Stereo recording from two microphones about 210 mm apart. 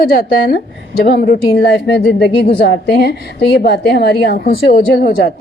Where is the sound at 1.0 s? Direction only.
45° left (ahead or behind).